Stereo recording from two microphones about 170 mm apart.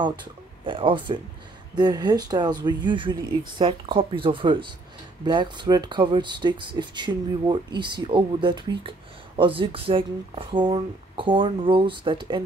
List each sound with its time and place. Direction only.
0.0 s speech: 25° right (ahead or behind)